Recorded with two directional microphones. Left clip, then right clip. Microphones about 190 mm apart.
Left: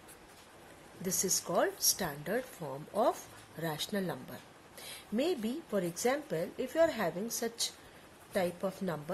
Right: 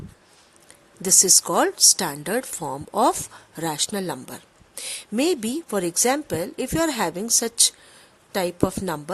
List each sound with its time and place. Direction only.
1.0 s speech: 55° right (ahead or behind)